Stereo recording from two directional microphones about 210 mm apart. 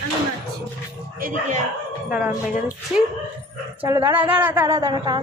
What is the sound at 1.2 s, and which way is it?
Speech, 35° right (ahead or behind).